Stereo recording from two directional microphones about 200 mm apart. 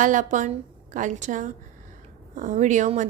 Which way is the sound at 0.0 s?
40° right (ahead or behind).